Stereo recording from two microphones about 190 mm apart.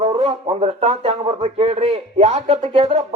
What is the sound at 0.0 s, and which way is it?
A man's voice, 35° right (ahead or behind).